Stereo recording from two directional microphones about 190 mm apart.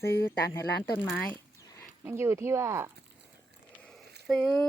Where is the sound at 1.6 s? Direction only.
15° left (ahead or behind).